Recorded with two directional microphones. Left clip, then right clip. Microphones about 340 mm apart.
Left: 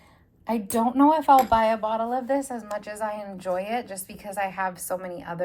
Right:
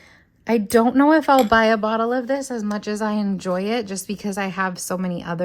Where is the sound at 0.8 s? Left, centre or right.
Right.